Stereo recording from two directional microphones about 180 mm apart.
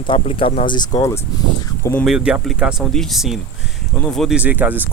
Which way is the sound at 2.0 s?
5° right (ahead or behind).